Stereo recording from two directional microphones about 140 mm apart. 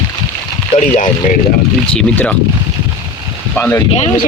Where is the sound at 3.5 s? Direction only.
15° left (ahead or behind).